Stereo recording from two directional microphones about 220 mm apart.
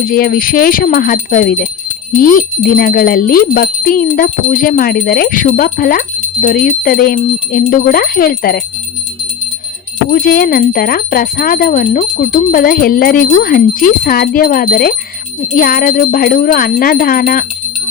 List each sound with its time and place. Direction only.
0.0 s speech: 40° left (ahead or behind)
10.1 s speech: 40° left (ahead or behind)